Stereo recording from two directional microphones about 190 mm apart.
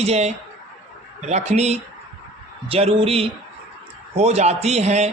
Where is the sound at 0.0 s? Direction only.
35° right (ahead or behind).